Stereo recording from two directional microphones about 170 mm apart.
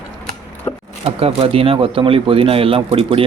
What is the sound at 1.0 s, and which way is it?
Speech, 35° right (ahead or behind).